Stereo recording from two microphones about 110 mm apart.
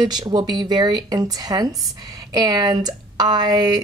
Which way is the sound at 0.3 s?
40° right (ahead or behind).